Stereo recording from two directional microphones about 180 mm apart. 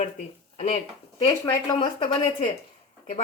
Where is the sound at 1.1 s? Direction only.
20° left (ahead or behind).